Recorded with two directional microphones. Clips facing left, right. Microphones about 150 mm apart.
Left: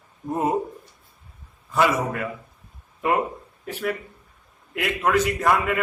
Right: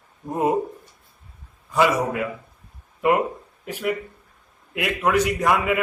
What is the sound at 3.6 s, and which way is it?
A man's voice, 10° right (ahead or behind).